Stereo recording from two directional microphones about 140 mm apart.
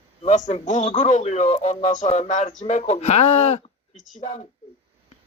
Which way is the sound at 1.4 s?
45° left (ahead or behind).